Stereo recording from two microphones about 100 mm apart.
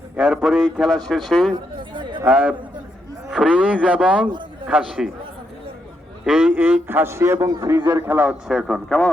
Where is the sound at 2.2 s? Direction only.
15° right (ahead or behind).